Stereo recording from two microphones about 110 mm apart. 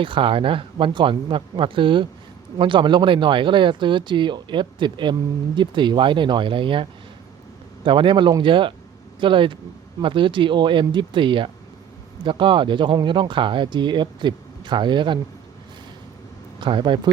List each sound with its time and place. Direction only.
0.0 s speech: 50° right (ahead or behind)
7.9 s speech: 50° right (ahead or behind)
16.6 s speech: 45° right (ahead or behind)